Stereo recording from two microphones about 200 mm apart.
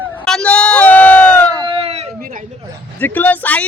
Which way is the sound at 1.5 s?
25° right (ahead or behind).